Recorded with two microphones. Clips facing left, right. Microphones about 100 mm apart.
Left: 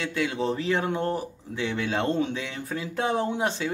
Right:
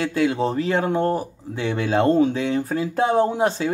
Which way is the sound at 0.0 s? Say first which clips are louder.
Right 6 dB; 35° right (ahead or behind).